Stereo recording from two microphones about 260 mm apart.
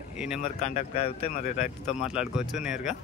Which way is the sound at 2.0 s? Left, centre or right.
Centre.